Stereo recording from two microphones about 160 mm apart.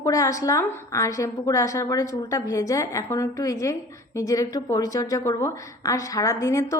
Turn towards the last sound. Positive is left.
turn(degrees=20)  # may be behind; listen again after turning